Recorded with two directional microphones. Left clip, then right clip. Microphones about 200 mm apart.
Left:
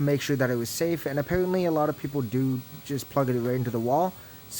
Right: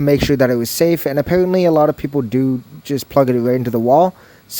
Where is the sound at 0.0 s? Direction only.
45° right (ahead or behind).